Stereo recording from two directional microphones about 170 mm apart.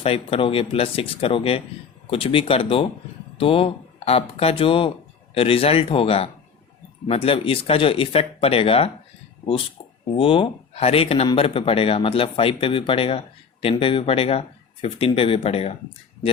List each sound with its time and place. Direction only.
0.0 s speech: 35° left (ahead or behind)
10.2 s speech: 30° left (ahead or behind)